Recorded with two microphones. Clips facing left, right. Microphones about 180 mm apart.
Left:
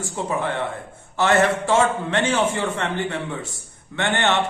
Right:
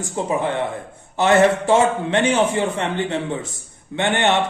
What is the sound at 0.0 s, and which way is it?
A man's voice, 20° right (ahead or behind).